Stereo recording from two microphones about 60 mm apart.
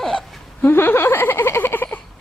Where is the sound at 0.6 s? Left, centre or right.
Left.